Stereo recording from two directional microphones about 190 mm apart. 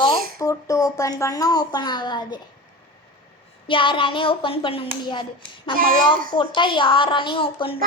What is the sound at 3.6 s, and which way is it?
Speech, 25° left (ahead or behind).